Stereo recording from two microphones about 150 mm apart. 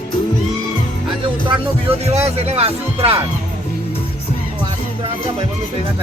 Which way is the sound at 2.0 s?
45° right (ahead or behind).